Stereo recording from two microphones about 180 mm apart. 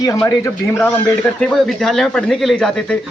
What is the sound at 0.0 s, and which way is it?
Speech, 20° left (ahead or behind).